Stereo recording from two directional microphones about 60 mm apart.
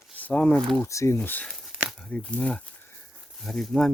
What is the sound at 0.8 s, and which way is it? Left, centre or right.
Speech, left.